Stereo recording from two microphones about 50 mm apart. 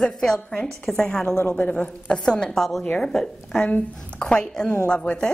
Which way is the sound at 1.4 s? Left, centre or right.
Left.